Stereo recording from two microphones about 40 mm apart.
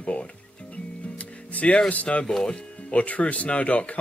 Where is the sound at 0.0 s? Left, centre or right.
Left.